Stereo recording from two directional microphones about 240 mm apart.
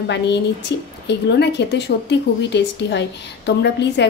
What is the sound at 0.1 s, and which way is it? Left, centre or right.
A woman's voice, left.